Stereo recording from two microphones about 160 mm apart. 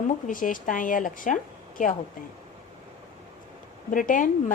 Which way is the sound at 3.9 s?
55° left (ahead or behind).